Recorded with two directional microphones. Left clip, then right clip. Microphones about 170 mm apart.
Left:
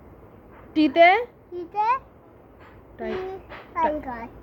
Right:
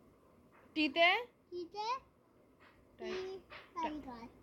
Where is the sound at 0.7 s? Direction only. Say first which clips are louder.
Left 14 dB; 35° left (ahead or behind).